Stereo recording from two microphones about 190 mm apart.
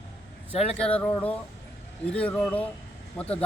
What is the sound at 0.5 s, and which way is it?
Speech, 30° left (ahead or behind).